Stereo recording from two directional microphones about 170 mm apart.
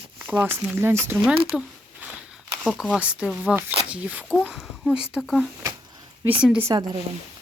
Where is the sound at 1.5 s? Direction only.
10° right (ahead or behind).